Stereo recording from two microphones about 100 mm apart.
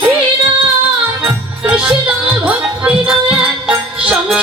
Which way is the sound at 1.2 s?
15° right (ahead or behind).